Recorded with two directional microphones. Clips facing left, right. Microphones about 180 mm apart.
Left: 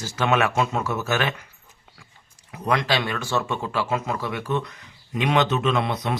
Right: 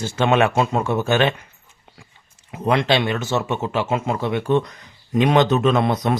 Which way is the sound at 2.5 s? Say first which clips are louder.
Right 5 dB; 25° right (ahead or behind).